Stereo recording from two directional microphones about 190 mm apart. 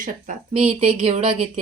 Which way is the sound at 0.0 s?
45° right (ahead or behind).